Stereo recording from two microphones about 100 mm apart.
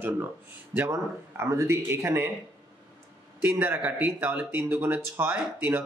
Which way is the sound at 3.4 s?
15° right (ahead or behind).